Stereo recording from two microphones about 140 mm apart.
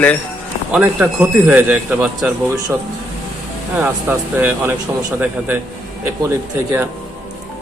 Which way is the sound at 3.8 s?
15° right (ahead or behind).